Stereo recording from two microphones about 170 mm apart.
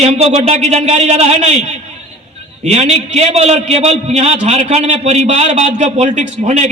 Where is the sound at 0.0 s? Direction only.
40° right (ahead or behind).